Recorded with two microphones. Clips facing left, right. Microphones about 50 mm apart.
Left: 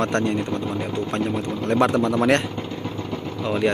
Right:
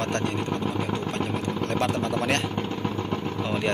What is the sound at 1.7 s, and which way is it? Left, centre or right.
Speech, left.